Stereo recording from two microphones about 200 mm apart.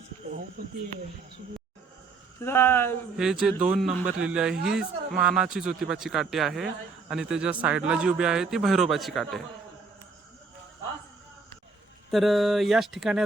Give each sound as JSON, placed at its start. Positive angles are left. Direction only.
{"t": 0.2, "sound": "cricket", "side_deg": -30}
{"t": 2.4, "sound": "speech", "side_deg": 10}
{"t": 3.2, "sound": "speech", "side_deg": -5}
{"t": 12.1, "sound": "speech", "side_deg": 0}